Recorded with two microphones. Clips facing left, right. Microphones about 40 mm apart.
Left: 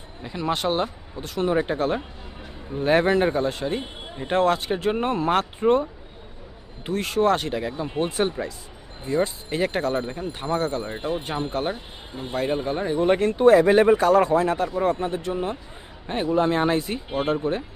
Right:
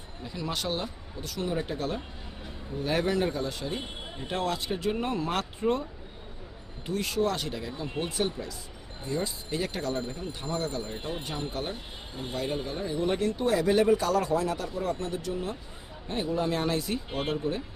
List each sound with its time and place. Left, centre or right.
0.2 s speech: left